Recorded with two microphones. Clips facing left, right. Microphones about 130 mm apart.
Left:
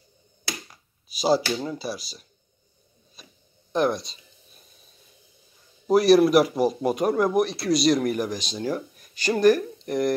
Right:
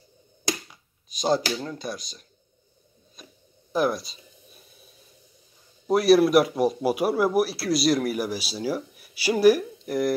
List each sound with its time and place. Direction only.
0.7 s speech: 5° left (ahead or behind)
3.2 s a sound: centre (ahead or behind)
5.9 s speech: centre (ahead or behind)